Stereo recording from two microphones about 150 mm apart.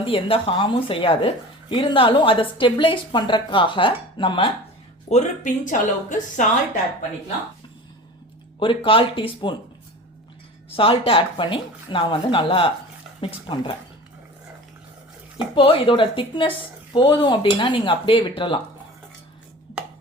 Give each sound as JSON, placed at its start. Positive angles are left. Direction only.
{"t": 0.0, "sound": "a woman's voice", "side_deg": 40}
{"t": 5.0, "sound": "speech", "side_deg": 50}
{"t": 8.5, "sound": "a woman's voice", "side_deg": 35}
{"t": 10.7, "sound": "a woman's voice", "side_deg": 40}
{"t": 15.5, "sound": "a woman's voice", "side_deg": 35}